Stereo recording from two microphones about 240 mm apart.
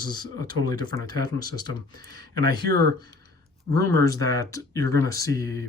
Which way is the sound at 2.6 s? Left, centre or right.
Right.